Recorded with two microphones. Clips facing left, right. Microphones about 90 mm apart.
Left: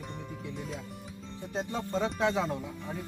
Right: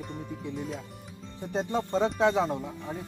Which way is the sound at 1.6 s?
35° right (ahead or behind).